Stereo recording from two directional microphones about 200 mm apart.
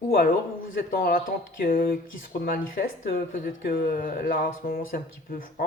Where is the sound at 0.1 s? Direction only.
45° left (ahead or behind).